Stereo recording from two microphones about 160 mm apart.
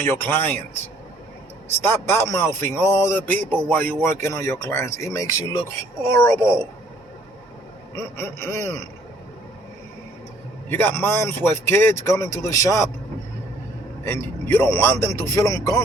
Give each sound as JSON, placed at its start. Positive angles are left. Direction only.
{"t": 0.0, "sound": "a man's voice", "side_deg": 15}
{"t": 1.8, "sound": "a man's voice", "side_deg": 15}
{"t": 7.9, "sound": "a man's voice", "side_deg": 15}
{"t": 10.7, "sound": "a man's voice", "side_deg": 10}
{"t": 14.0, "sound": "a man's voice", "side_deg": 15}